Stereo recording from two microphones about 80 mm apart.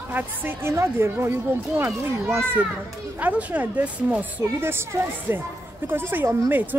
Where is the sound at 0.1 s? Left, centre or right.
Right.